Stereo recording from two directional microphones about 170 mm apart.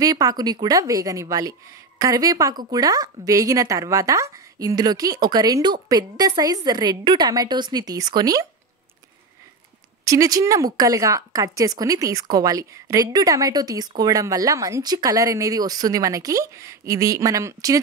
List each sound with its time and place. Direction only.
0.0 s a woman's voice: 20° right (ahead or behind)
10.0 s a woman's voice: 20° right (ahead or behind)